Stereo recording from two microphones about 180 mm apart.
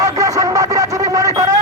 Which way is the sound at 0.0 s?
20° right (ahead or behind).